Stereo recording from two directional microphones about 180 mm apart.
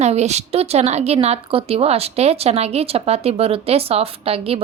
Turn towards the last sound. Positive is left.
turn(degrees=-35)  # may be behind; listen again after turning